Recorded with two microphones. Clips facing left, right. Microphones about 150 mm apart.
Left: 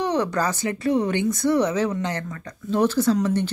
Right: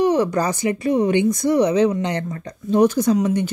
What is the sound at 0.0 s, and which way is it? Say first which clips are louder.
Speech: right 5 dB; 10° right (ahead or behind).